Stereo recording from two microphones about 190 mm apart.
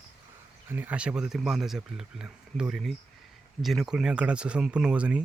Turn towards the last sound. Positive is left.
turn(degrees=-5)  # may be behind; listen again after turning